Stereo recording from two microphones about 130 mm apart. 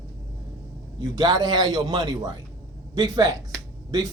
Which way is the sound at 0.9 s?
30° right (ahead or behind).